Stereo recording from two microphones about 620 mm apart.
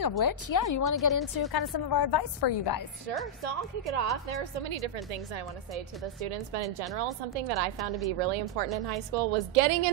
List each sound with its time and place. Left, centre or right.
0.2 s a woman's voice: left
3.4 s a woman's voice: right
6.2 s a woman's voice: right